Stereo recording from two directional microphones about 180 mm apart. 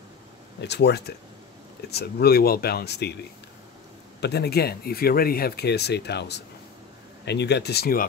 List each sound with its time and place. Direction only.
0.6 s speech: 70° left (ahead or behind)
4.2 s speech: 65° left (ahead or behind)